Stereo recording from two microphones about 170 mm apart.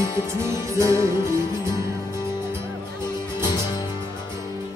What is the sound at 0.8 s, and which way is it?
Music, 15° right (ahead or behind).